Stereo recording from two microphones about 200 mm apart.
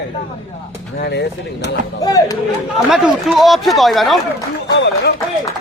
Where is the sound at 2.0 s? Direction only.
15° left (ahead or behind).